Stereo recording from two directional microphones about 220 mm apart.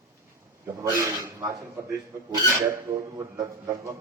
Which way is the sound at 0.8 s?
15° right (ahead or behind).